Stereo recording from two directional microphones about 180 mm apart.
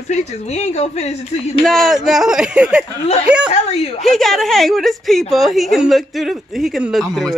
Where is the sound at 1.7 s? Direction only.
Centre (ahead or behind).